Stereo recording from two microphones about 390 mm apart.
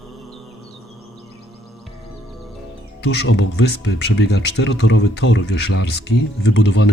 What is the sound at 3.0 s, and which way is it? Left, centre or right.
Speech, left.